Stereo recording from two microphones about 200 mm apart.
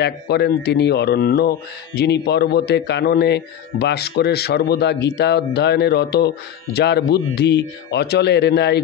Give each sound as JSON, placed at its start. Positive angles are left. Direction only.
{"t": 0.0, "sound": "a man's voice", "side_deg": 55}